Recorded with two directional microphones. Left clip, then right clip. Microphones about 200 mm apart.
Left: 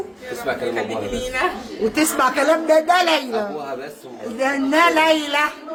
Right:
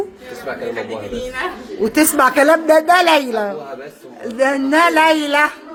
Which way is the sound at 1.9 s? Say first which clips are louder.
Right 6 dB; 35° right (ahead or behind).